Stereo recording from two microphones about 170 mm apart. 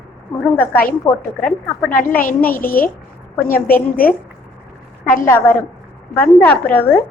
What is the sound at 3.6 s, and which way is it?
A woman's voice, 60° left (ahead or behind).